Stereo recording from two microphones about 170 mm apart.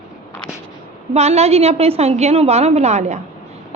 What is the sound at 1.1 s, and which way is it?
A woman's voice, 40° right (ahead or behind).